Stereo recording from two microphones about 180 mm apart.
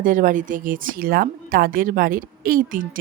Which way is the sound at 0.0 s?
45° right (ahead or behind).